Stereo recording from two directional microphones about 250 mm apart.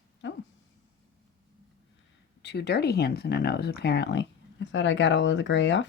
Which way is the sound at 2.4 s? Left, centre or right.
Left.